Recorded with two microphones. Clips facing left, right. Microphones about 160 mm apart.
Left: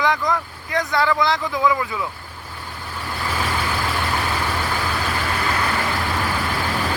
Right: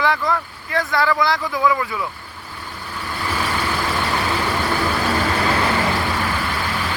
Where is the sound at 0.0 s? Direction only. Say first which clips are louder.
Right 1 dB; 15° left (ahead or behind).